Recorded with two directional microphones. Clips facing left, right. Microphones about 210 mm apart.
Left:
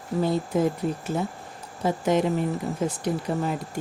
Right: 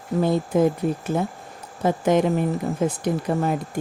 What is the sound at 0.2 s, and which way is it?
Speech, 55° right (ahead or behind).